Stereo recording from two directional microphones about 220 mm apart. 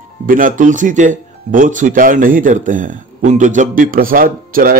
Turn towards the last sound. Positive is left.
turn(degrees=-40)  # may be behind; listen again after turning